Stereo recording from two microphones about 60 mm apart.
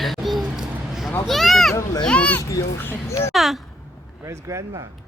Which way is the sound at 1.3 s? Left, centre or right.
Centre.